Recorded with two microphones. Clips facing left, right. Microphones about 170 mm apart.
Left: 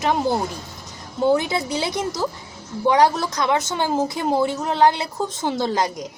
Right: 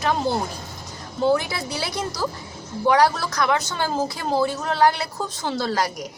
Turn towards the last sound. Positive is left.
turn(degrees=20)  # may be behind; listen again after turning